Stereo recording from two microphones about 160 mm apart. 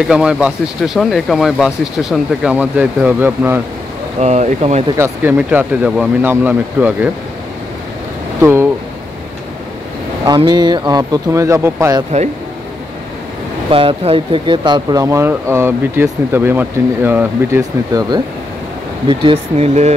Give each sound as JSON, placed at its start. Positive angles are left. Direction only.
{"t": 0.1, "sound": "speech", "side_deg": -5}
{"t": 4.2, "sound": "speech", "side_deg": -45}
{"t": 4.9, "sound": "speech", "side_deg": -15}
{"t": 8.4, "sound": "speech", "side_deg": -15}
{"t": 10.2, "sound": "speech", "side_deg": -25}
{"t": 13.7, "sound": "speech", "side_deg": -35}
{"t": 19.0, "sound": "speech", "side_deg": -30}